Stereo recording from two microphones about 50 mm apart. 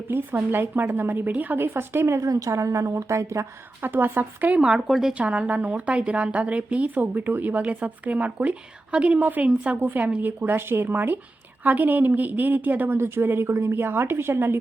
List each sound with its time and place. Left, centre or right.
0.1 s a woman's voice: right
1.6 s a woman's voice: right
3.8 s a woman's voice: right
4.9 s speech: centre
5.1 s a woman's voice: right
9.8 s a woman's voice: right
13.0 s speech: right
13.7 s speech: right